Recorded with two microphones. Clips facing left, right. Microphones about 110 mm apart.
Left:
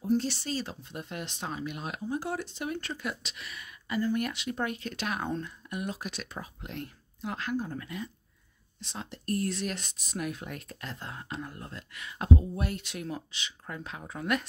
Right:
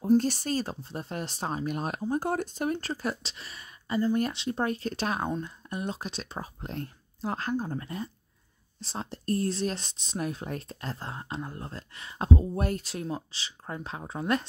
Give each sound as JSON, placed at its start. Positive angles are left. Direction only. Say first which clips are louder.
{"t": 0.0, "sound": "speech", "louder": "right 5 dB", "side_deg": -45}
{"t": 12.5, "sound": "speech", "louder": "right 4 dB", "side_deg": -40}